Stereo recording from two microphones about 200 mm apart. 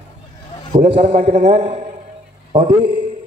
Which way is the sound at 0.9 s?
30° right (ahead or behind).